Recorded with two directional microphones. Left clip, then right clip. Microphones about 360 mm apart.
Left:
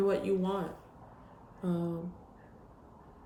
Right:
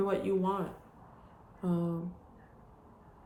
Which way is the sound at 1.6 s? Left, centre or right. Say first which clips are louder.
Right 1 dB; centre.